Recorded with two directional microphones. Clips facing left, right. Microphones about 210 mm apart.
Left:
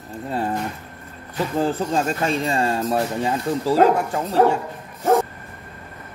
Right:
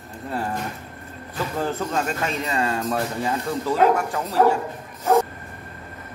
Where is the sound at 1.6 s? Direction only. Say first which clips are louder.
Left 3 dB; 30° left (ahead or behind).